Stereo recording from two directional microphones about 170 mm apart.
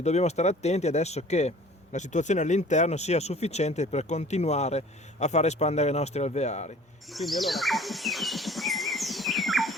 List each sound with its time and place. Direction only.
0.0 s speech: 40° left (ahead or behind)
7.1 s bird: centre (ahead or behind)